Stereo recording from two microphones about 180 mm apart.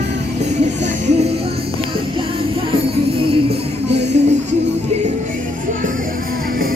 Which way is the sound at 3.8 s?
75° right (ahead or behind).